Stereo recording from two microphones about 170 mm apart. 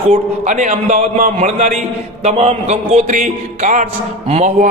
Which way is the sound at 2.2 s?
40° right (ahead or behind).